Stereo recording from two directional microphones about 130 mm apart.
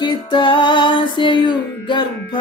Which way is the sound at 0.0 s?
35° left (ahead or behind).